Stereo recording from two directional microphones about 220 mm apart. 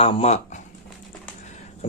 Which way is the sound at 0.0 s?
25° left (ahead or behind).